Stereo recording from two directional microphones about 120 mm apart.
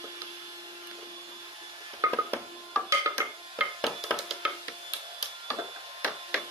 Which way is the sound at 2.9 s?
25° right (ahead or behind).